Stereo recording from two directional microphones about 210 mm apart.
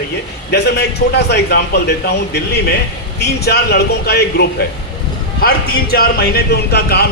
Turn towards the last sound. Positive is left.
turn(degrees=50)  # may be behind; listen again after turning